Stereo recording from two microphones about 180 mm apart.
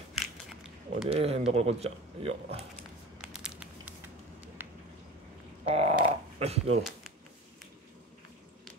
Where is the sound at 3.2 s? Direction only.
5° right (ahead or behind).